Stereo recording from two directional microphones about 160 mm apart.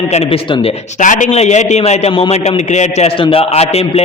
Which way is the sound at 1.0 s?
50° left (ahead or behind).